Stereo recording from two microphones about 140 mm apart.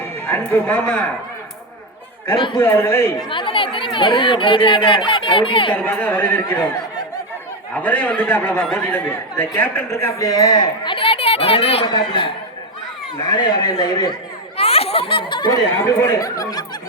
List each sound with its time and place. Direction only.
0.3 s a man's voice: 15° left (ahead or behind)
2.3 s speech: 35° left (ahead or behind)
2.6 s speech: 15° left (ahead or behind)
3.2 s speech: 40° left (ahead or behind)
5.7 s a man's voice: 10° left (ahead or behind)
7.8 s a man's voice: 10° left (ahead or behind); by 12.3 s 35° left (ahead or behind)
13.3 s speech: 30° left (ahead or behind)
14.5 s a sound: 45° left (ahead or behind)
16.0 s speech: 25° left (ahead or behind)